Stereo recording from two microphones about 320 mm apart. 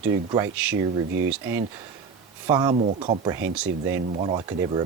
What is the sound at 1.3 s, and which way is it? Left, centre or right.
Speech, centre.